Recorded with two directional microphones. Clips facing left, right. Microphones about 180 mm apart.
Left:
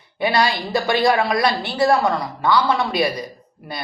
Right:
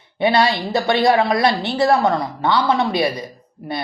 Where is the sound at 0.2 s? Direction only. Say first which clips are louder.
Right 3 dB; 25° right (ahead or behind).